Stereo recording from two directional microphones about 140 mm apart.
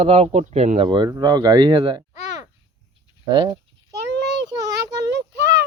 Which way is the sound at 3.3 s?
35° right (ahead or behind).